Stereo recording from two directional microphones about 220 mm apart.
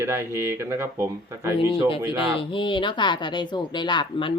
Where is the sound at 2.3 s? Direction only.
25° left (ahead or behind).